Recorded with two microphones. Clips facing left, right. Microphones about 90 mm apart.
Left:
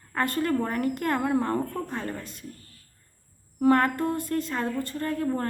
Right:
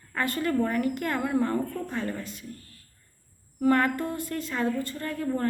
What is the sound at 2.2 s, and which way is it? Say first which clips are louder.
Speech: right 1 dB; 45° left (ahead or behind).